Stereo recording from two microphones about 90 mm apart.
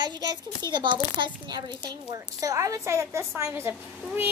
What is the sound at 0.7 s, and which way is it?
A woman's voice, 65° right (ahead or behind).